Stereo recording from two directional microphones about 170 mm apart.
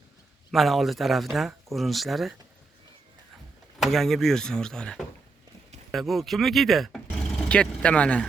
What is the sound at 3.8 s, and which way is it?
Speech, centre (ahead or behind).